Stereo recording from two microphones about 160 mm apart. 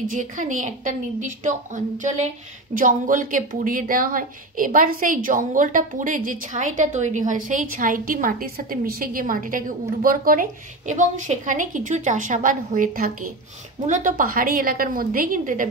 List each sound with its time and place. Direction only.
0.0 s a woman's voice: 55° right (ahead or behind)